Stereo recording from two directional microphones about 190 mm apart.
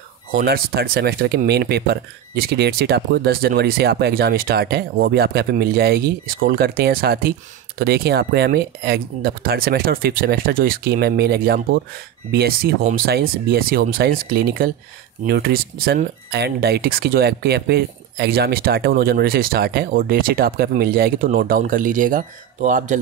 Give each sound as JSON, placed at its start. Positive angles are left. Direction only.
{"t": 0.4, "sound": "speech", "side_deg": -55}